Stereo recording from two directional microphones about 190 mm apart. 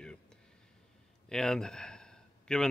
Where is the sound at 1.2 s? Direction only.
5° left (ahead or behind).